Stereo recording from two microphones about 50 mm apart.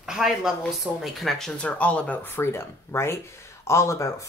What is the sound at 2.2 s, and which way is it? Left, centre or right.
Speech, left.